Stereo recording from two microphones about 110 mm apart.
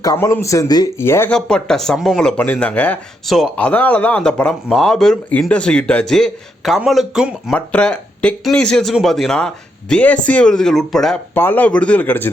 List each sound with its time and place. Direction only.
0.0 s speech: 30° left (ahead or behind)
0.9 s speech: 25° left (ahead or behind)
1.3 s speech: 10° left (ahead or behind)
3.2 s speech: centre (ahead or behind)
3.5 s speech: 10° left (ahead or behind); by 7.5 s 5° right (ahead or behind)
7.5 s speech: 10° left (ahead or behind)
11.3 s speech: 20° left (ahead or behind)